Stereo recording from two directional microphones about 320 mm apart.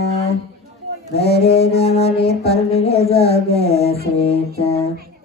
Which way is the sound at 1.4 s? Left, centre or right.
Centre.